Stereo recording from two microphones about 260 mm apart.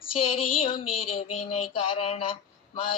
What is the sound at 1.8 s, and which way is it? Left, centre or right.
Speech, left.